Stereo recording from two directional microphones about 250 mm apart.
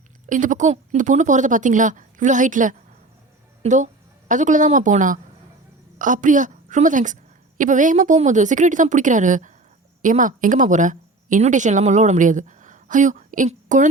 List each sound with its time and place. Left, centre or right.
0.3 s a woman's voice: right